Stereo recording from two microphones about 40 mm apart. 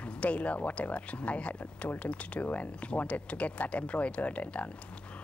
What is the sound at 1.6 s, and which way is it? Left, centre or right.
Speech, left.